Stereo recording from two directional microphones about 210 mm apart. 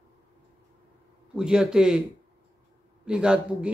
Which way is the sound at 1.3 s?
5° right (ahead or behind).